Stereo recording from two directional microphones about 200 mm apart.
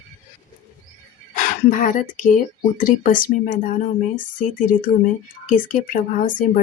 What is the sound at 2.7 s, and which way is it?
Speech, 45° left (ahead or behind).